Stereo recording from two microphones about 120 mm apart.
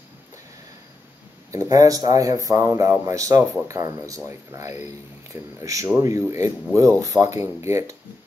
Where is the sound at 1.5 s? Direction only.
30° right (ahead or behind).